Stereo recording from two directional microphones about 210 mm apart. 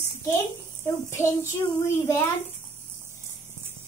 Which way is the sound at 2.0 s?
15° left (ahead or behind).